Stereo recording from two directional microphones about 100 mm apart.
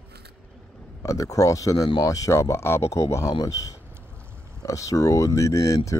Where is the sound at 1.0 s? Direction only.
35° left (ahead or behind).